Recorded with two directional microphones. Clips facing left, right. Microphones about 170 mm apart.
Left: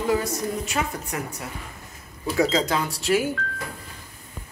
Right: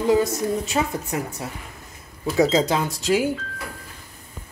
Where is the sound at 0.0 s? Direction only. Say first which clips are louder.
Right 4 dB; 25° right (ahead or behind).